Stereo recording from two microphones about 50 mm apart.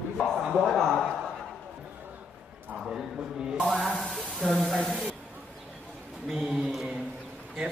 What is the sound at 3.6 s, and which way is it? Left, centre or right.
Speech, centre.